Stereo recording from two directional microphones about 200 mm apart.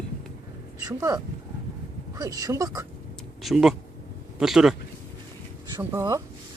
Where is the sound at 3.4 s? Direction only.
Centre (ahead or behind).